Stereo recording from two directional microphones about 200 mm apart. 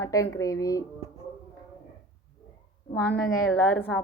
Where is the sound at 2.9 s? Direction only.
10° left (ahead or behind).